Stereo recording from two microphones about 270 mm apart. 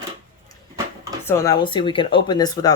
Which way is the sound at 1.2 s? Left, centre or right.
Centre.